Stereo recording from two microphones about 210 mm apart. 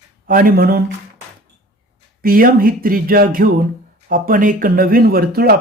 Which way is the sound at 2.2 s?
45° right (ahead or behind).